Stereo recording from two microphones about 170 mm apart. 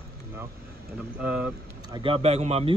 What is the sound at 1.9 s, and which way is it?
Speech, 30° right (ahead or behind).